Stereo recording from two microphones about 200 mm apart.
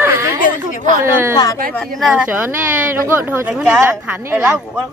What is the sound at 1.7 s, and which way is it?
Speech, centre (ahead or behind).